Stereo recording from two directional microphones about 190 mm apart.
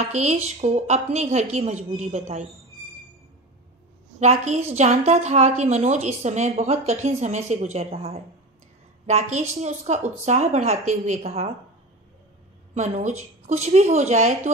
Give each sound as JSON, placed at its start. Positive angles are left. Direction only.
{"t": 0.0, "sound": "a woman's voice", "side_deg": -35}
{"t": 4.2, "sound": "a woman's voice", "side_deg": -35}
{"t": 12.7, "sound": "a woman's voice", "side_deg": -35}